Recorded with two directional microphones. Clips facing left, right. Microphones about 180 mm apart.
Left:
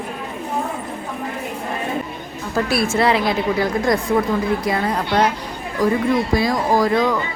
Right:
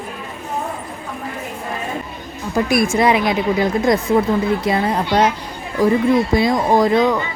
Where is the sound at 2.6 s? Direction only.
15° right (ahead or behind).